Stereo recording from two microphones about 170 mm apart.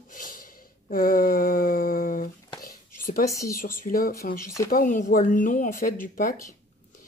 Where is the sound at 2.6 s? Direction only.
55° left (ahead or behind).